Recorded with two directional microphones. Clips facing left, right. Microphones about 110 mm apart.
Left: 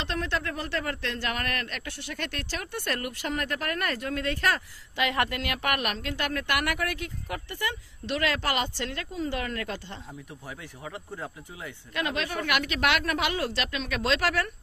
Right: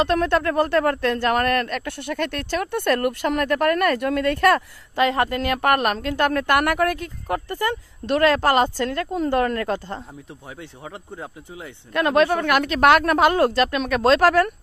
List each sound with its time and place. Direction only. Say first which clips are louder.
0.0 s speech: right 11 dB; 55° right (ahead or behind)
5.0 s speech: right 7 dB; 35° right (ahead or behind)
11.9 s speech: right 13 dB; 50° right (ahead or behind)